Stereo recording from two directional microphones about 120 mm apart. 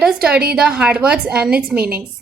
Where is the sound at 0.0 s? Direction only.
5° right (ahead or behind).